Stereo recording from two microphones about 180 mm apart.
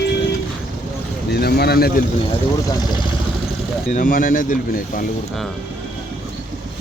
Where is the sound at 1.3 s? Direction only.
60° left (ahead or behind).